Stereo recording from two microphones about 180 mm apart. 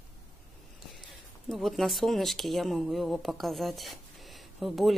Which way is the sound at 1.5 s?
Centre (ahead or behind).